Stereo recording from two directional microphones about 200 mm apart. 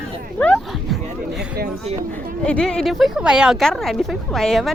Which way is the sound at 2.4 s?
5° left (ahead or behind).